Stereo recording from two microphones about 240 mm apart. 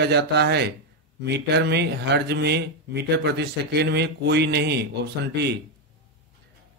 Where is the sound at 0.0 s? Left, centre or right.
Right.